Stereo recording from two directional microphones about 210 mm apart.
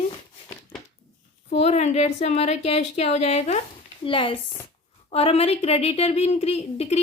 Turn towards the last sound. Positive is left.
turn(degrees=30)  # may be behind; listen again after turning